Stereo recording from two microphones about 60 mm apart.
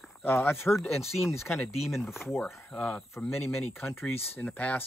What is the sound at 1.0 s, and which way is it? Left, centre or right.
Speech, centre.